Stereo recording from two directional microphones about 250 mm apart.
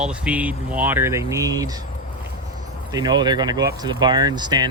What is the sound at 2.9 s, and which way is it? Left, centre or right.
Speech, centre.